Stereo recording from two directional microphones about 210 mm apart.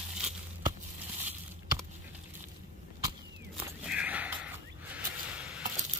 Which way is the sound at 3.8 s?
5° right (ahead or behind).